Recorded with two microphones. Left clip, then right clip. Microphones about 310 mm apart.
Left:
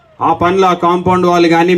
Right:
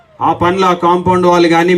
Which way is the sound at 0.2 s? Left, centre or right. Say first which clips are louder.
Left 1 dB; centre.